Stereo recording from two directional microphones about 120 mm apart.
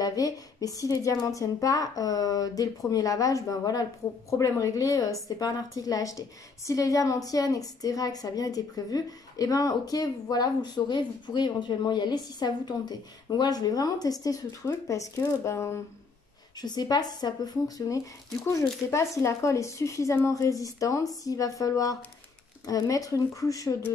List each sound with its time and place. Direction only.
0.0 s a woman's voice: 30° left (ahead or behind)
16.5 s a woman's voice: 35° left (ahead or behind)